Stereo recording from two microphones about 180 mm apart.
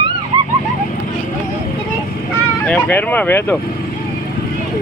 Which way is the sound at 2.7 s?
10° left (ahead or behind).